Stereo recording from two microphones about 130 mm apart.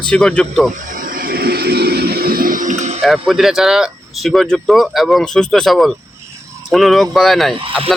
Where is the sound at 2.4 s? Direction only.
90° right; by 3.0 s 65° right (ahead or behind).